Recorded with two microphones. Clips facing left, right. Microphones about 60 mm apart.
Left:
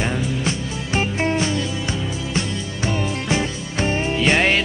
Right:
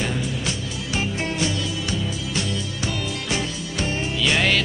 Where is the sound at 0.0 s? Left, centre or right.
Left.